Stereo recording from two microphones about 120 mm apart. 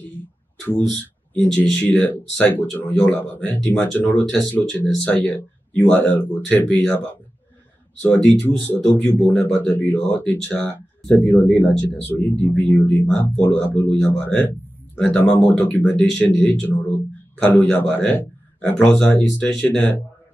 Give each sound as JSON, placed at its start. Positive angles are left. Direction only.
{"t": 0.8, "sound": "speech", "side_deg": 5}
{"t": 8.0, "sound": "a man's voice", "side_deg": 10}